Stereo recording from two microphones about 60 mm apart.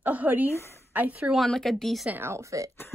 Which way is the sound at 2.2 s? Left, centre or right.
Right.